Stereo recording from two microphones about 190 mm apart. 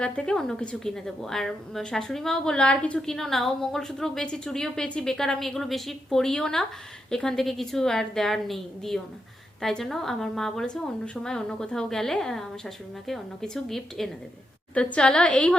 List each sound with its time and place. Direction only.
0.0 s a woman's voice: 5° left (ahead or behind)